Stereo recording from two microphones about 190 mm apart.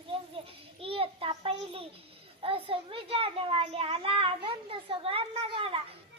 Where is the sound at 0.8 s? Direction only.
30° right (ahead or behind).